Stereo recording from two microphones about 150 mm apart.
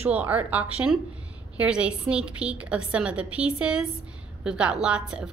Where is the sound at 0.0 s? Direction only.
10° right (ahead or behind).